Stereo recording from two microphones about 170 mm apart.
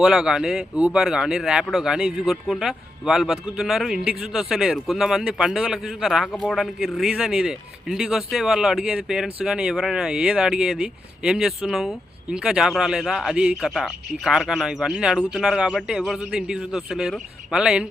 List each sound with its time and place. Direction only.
0.0 s speech: 5° right (ahead or behind)